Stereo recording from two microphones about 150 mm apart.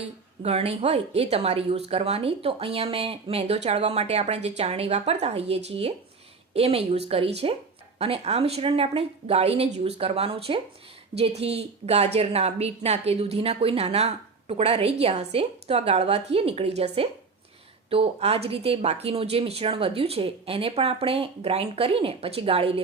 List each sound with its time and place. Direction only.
0.4 s a woman's voice: 45° right (ahead or behind)